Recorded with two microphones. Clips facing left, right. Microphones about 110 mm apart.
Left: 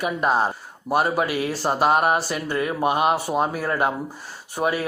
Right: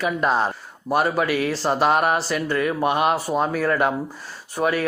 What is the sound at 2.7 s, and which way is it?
Speech, 5° left (ahead or behind).